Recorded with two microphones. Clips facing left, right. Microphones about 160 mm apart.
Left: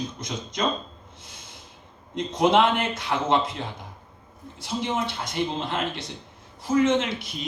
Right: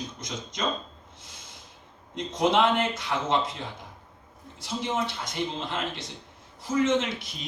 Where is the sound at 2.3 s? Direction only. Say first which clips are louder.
Left 3 dB; 60° left (ahead or behind).